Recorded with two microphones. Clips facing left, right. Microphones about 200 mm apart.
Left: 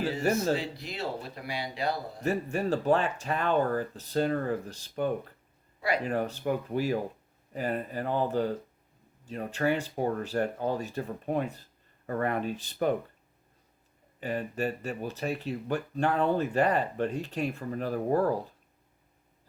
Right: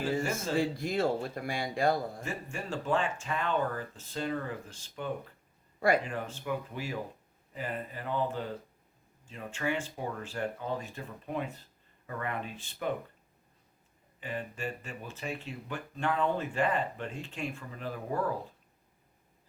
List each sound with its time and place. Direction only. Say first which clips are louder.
0.5 s speech: right 3 dB; 50° right (ahead or behind)
2.2 s speech: left 10 dB; 40° left (ahead or behind)
6.1 s speech: left 6 dB; 40° left (ahead or behind)
14.2 s speech: left 7 dB; 40° left (ahead or behind)